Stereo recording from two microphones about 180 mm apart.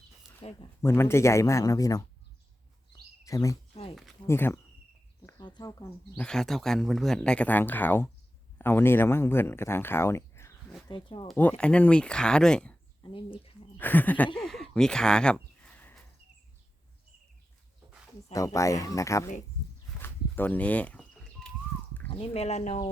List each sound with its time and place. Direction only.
0.4 s speech: 30° left (ahead or behind)
0.8 s speech: 15° left (ahead or behind)
3.2 s speech: 20° left (ahead or behind)
5.4 s speech: 25° left (ahead or behind)
6.1 s speech: 5° left (ahead or behind)
10.8 s speech: 25° left (ahead or behind)
11.3 s speech: 10° left (ahead or behind)
13.0 s speech: 30° left (ahead or behind)
13.7 s speech: 10° left (ahead or behind)
14.3 s a sound: centre (ahead or behind)
18.3 s speech: 15° left (ahead or behind)
20.0 s a sound: 10° left (ahead or behind)
22.1 s speech: 35° left (ahead or behind)